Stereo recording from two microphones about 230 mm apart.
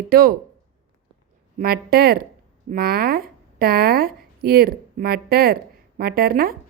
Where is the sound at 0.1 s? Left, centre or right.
Right.